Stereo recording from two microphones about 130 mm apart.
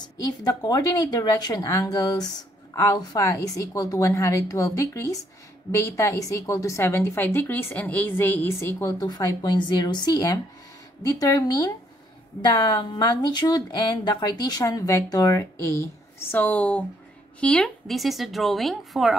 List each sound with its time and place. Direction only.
0.0 s speech: 30° left (ahead or behind)
8.9 s a woman's voice: 30° left (ahead or behind); by 19.1 s centre (ahead or behind)